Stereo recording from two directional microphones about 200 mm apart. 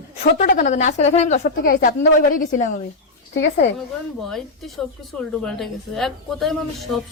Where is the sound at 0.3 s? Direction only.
40° left (ahead or behind).